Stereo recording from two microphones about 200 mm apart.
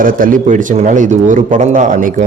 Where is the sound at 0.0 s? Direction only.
45° right (ahead or behind).